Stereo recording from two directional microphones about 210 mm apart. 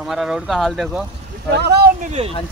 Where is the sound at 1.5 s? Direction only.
50° right (ahead or behind).